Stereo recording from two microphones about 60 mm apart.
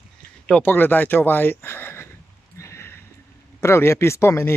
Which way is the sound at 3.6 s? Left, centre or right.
Left.